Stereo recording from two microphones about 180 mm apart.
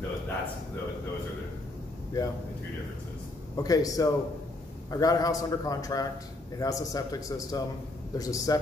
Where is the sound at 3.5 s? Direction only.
20° left (ahead or behind).